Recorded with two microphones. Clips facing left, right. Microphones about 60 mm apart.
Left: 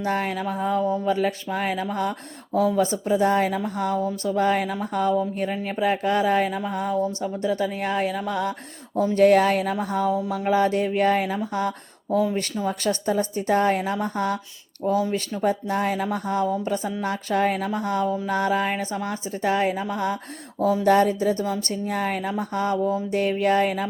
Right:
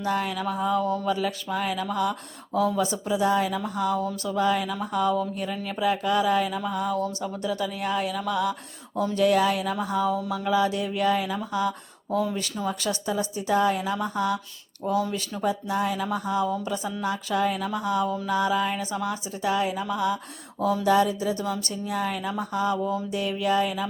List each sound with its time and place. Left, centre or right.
0.0 s a woman's voice: left
0.8 s speech: centre
1.0 s a woman's voice: left
4.0 s a woman's voice: left
15.4 s a woman's voice: left